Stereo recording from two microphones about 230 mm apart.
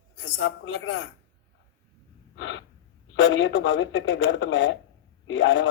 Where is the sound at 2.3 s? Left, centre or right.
Left.